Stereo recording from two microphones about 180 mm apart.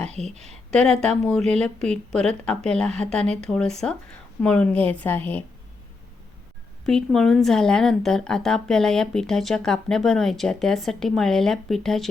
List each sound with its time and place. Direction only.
0.3 s speech: 40° right (ahead or behind)
0.7 s a woman's voice: 5° left (ahead or behind)
6.8 s a woman's voice: 5° left (ahead or behind)